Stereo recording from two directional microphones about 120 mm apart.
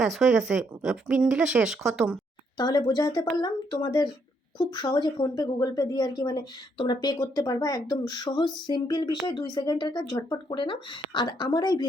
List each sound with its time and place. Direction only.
0.0 s speech: centre (ahead or behind)
2.6 s a woman's voice: 35° left (ahead or behind)